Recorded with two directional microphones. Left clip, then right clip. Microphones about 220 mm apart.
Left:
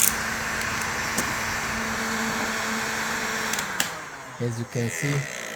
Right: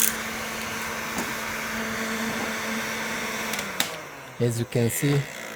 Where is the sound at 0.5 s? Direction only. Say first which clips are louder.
Left 4 dB; 20° left (ahead or behind).